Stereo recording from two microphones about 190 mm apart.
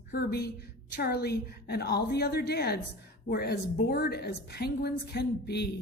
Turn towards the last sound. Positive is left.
turn(degrees=60)  # may be behind; listen again after turning